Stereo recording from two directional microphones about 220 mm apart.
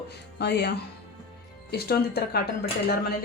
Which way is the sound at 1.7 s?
45° left (ahead or behind).